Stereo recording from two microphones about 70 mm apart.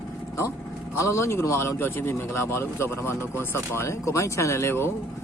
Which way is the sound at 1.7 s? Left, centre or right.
Left.